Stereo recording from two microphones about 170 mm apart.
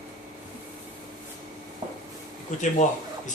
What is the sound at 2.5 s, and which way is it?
Speech, 50° left (ahead or behind).